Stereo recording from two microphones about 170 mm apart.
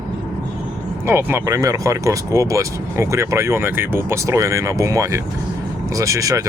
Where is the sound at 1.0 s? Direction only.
15° right (ahead or behind).